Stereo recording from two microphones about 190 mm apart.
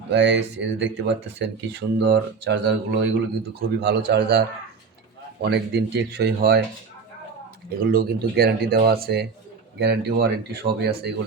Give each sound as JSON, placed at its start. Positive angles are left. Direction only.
{"t": 0.1, "sound": "speech", "side_deg": -65}
{"t": 7.9, "sound": "speech", "side_deg": -55}